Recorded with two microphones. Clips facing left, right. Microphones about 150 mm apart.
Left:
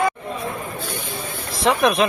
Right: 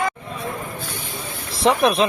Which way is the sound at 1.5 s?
30° right (ahead or behind).